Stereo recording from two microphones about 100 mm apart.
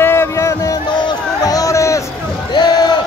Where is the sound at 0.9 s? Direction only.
45° left (ahead or behind).